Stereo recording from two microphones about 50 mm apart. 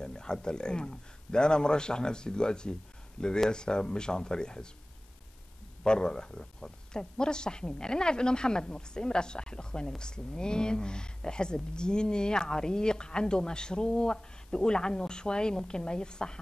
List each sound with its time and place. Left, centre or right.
0.0 s a man's voice: centre
5.9 s speech: centre